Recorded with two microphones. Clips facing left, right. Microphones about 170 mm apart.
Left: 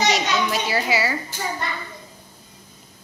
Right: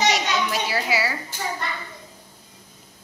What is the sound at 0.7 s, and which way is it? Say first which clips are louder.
Speech: left 2 dB; centre (ahead or behind).